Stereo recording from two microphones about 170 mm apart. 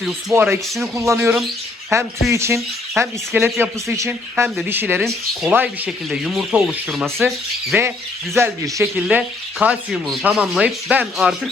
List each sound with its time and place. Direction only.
0.3 s speech: 15° right (ahead or behind)
5.0 s speech: centre (ahead or behind)
8.4 s speech: 15° right (ahead or behind)